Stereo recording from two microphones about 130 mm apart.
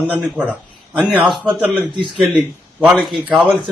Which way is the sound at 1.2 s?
35° right (ahead or behind).